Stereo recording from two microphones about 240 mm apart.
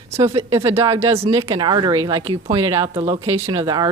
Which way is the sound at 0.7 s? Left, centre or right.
Centre.